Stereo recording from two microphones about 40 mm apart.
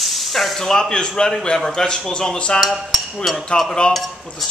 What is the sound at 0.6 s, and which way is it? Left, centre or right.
Speech, centre.